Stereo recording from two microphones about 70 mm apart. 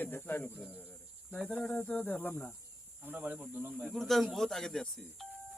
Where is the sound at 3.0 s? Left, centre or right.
Right.